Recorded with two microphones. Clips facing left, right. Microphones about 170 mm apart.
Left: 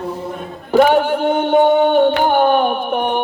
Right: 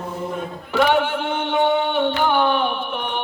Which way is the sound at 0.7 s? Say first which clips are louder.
Left 6 dB; 40° left (ahead or behind).